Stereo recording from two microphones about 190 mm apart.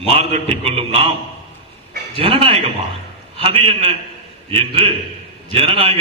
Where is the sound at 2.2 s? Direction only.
30° right (ahead or behind).